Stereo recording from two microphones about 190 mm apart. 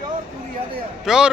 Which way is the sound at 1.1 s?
5° right (ahead or behind).